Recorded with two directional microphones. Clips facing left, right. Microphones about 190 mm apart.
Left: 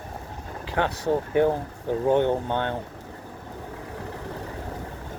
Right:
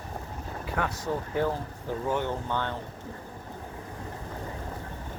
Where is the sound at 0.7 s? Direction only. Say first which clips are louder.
Left 7 dB; 30° left (ahead or behind).